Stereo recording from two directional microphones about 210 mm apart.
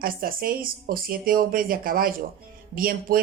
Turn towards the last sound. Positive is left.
turn(degrees=-45)  # may be behind; listen again after turning